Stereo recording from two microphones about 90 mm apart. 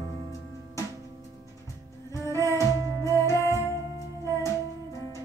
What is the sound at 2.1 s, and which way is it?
Music, 35° left (ahead or behind).